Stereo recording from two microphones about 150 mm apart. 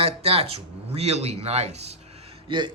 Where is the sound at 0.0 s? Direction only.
40° right (ahead or behind).